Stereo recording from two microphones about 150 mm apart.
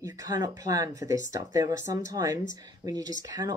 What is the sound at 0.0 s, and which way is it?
Speech, 20° right (ahead or behind).